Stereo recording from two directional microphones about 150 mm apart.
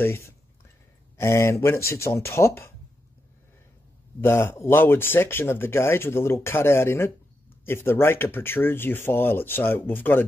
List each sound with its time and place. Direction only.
0.0 s speech: 15° left (ahead or behind)
4.2 s speech: 15° left (ahead or behind)